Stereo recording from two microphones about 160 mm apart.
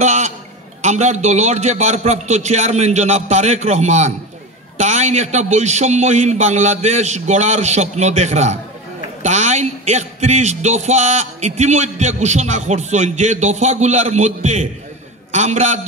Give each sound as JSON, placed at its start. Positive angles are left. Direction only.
{"t": 0.0, "sound": "a man's voice", "side_deg": -45}